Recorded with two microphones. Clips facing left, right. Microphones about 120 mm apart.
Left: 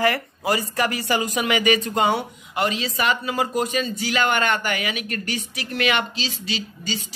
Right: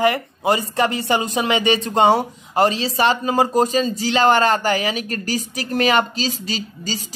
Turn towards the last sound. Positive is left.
turn(degrees=-40)  # may be behind; listen again after turning